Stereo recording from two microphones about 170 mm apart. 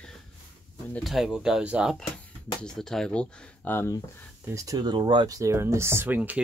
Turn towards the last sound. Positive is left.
turn(degrees=-10)  # may be behind; listen again after turning